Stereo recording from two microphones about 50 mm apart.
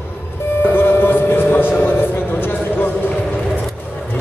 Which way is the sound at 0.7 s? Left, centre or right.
Left.